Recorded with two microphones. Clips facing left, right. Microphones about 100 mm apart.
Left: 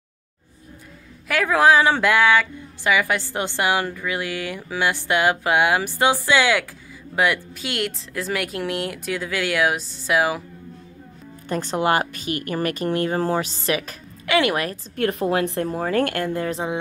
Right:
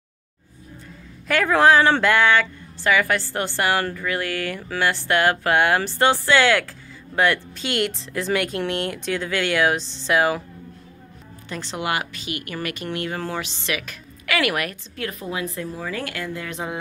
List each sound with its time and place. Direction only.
1.2 s speech: 5° left (ahead or behind)
11.4 s speech: 45° left (ahead or behind); by 14.8 s 30° left (ahead or behind)
15.0 s a woman's voice: 60° left (ahead or behind)